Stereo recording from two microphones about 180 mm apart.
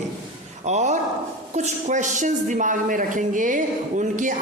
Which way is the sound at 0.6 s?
40° right (ahead or behind).